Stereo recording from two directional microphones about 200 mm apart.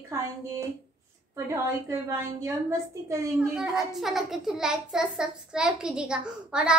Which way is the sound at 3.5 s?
5° right (ahead or behind).